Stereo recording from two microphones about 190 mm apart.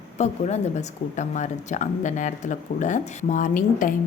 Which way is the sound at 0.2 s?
35° left (ahead or behind).